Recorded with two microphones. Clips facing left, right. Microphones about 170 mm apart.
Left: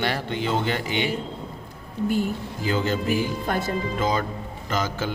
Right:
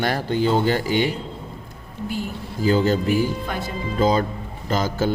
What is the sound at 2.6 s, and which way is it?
Speech, 35° right (ahead or behind).